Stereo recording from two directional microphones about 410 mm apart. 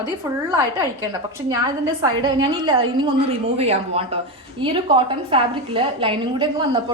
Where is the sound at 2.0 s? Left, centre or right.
Centre.